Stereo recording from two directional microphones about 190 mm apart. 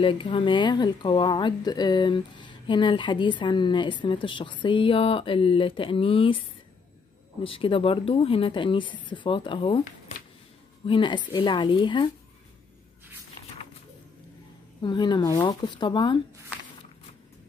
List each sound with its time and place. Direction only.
0.0 s speech: 25° left (ahead or behind)
7.4 s speech: 30° left (ahead or behind)
10.9 s speech: 25° left (ahead or behind)
14.8 s speech: 25° left (ahead or behind)